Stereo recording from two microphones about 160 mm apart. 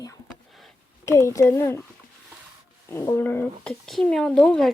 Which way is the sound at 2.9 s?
15° left (ahead or behind).